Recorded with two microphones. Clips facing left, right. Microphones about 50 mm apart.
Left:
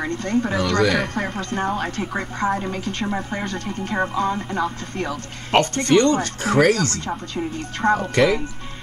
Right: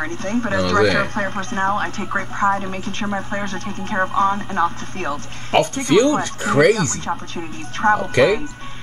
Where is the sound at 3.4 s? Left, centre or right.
Right.